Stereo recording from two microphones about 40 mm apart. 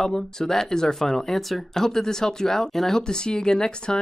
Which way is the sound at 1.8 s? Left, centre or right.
Centre.